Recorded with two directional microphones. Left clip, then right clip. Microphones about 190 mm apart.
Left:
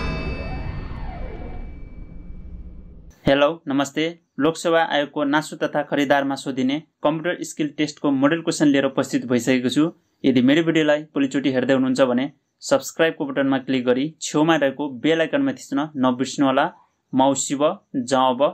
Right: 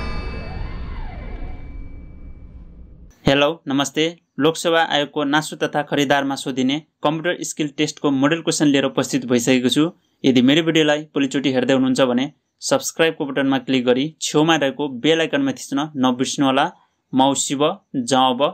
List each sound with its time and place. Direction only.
3.3 s speech: 35° right (ahead or behind)